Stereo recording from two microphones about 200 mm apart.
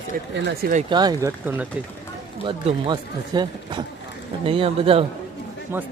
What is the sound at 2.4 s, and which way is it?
Speech, 25° right (ahead or behind).